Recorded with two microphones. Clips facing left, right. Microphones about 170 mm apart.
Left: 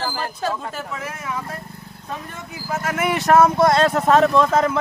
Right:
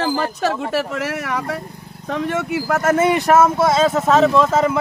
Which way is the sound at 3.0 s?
15° right (ahead or behind).